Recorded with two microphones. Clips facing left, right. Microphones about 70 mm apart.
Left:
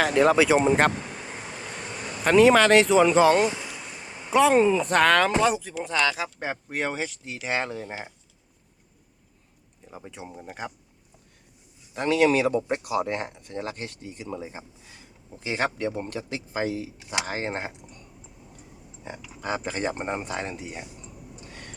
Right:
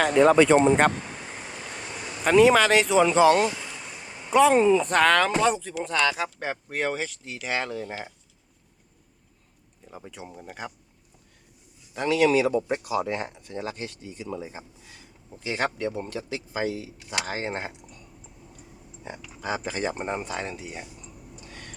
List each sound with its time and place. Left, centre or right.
0.0 s speech: centre
2.2 s speech: centre
6.4 s speech: centre
10.1 s speech: centre
11.9 s speech: left
15.5 s speech: centre
18.7 s a sound: centre
19.6 s speech: left
20.0 s speech: centre
21.5 s a sound: centre